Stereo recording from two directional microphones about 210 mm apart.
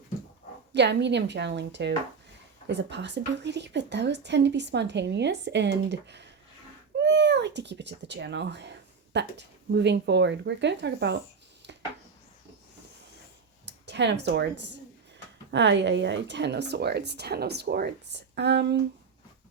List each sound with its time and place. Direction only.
0.7 s a woman's voice: 55° right (ahead or behind)
7.0 s cat: 55° right (ahead or behind)
9.7 s a woman's voice: 55° right (ahead or behind)
13.7 s a woman's voice: 55° right (ahead or behind)